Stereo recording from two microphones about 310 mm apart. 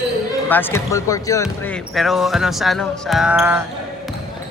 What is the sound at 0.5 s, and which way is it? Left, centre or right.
Speech, centre.